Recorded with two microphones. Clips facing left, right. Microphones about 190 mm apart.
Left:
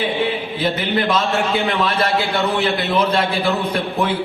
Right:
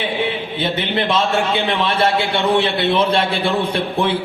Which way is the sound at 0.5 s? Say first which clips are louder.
Left 1 dB; 25° right (ahead or behind).